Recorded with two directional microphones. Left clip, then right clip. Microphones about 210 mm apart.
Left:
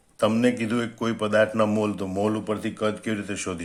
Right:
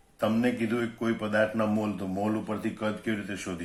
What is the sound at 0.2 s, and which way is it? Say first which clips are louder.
A man's voice: left 5 dB; 50° left (ahead or behind).